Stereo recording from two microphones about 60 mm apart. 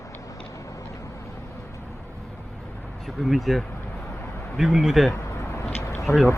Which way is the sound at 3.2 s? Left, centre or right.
Centre.